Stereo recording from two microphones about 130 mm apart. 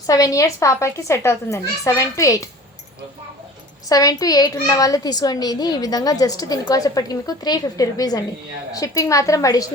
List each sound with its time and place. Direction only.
0.1 s a child's voice: 25° left (ahead or behind)
3.8 s a child's voice: 30° left (ahead or behind)